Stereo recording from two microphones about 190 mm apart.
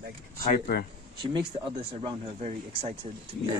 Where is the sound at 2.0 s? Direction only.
30° right (ahead or behind).